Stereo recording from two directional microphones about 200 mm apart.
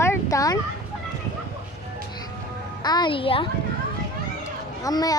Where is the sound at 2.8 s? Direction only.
20° left (ahead or behind).